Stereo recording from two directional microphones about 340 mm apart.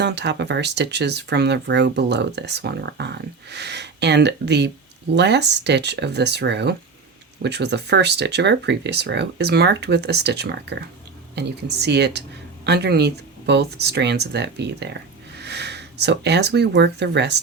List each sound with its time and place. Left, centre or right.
0.0 s speech: right